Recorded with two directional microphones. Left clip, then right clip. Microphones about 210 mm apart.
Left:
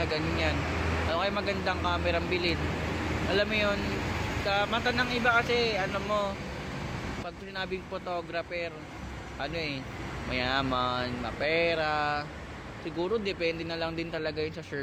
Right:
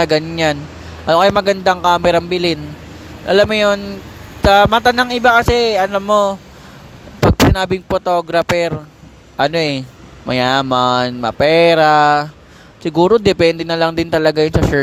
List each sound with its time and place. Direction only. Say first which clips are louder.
0.0 s speech: right 15 dB; 55° right (ahead or behind)
7.5 s speech: right 18 dB; 55° right (ahead or behind)